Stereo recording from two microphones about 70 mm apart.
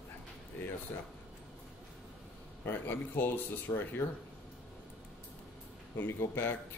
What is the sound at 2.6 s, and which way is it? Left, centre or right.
Speech, left.